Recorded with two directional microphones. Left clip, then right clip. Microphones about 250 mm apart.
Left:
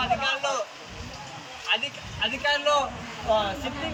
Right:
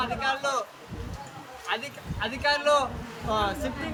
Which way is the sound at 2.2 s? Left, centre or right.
Centre.